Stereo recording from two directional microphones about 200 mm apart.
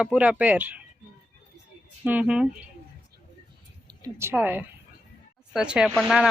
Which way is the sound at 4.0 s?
15° right (ahead or behind).